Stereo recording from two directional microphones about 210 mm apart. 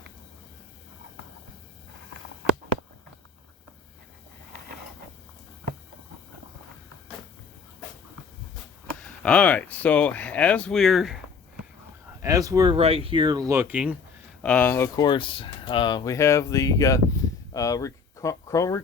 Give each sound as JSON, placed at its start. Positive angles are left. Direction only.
{"t": 9.2, "sound": "speech", "side_deg": 5}
{"t": 12.2, "sound": "speech", "side_deg": -15}
{"t": 14.4, "sound": "speech", "side_deg": 5}